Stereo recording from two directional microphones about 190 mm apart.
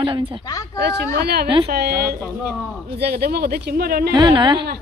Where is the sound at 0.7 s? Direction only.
60° right (ahead or behind).